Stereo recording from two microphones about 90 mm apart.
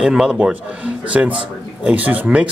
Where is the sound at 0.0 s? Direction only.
5° right (ahead or behind).